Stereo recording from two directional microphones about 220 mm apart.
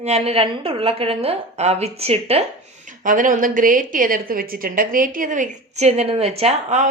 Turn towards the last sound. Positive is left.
turn(degrees=-30)  # may be behind; listen again after turning